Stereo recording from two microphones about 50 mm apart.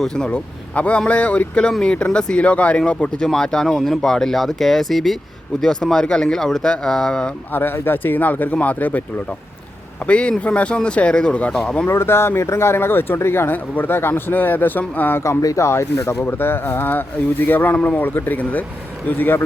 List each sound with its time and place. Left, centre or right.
0.3 s speech: left
3.2 s speech: centre
7.5 s speech: left
10.1 s speech: left
11.9 s speech: left
13.5 s speech: left
15.2 s speech: left
16.2 s speech: left